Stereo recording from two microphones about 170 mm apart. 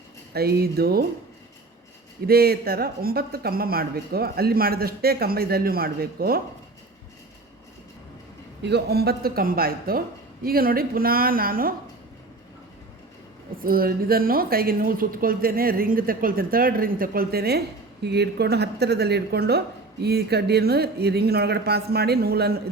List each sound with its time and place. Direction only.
0.3 s speech: 65° right (ahead or behind)
2.2 s speech: 65° right (ahead or behind)
8.6 s speech: 75° right (ahead or behind); by 11.7 s 60° right (ahead or behind)
13.6 s speech: 60° right (ahead or behind)
18.0 s speech: 75° right (ahead or behind)